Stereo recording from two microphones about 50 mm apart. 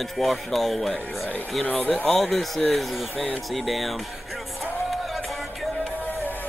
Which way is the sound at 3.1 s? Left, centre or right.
Left.